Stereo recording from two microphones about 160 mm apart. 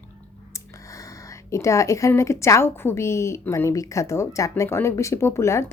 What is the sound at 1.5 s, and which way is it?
A woman's voice, 20° left (ahead or behind).